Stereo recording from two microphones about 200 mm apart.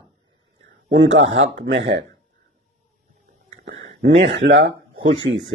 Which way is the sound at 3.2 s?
45° right (ahead or behind).